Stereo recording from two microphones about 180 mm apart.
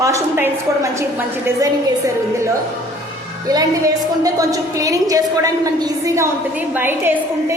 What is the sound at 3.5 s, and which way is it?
A woman's voice, 20° right (ahead or behind).